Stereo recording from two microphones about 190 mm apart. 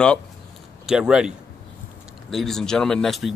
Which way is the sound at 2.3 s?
Centre (ahead or behind).